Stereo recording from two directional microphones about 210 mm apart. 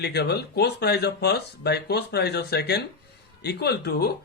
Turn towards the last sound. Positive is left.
turn(degrees=50)  # may be behind; listen again after turning